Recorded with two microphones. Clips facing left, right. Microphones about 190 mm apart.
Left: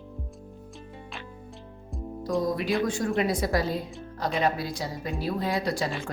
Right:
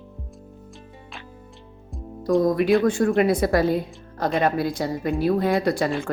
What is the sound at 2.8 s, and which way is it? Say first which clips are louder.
Speech: right 7 dB; 60° right (ahead or behind).